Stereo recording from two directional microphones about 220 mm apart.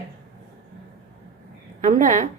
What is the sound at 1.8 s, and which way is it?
Speech, 35° right (ahead or behind).